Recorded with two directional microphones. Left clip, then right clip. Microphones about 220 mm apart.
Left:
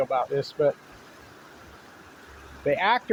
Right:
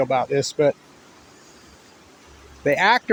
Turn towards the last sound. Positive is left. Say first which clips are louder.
# right 5 dB
turn(degrees=-45)  # may be behind; listen again after turning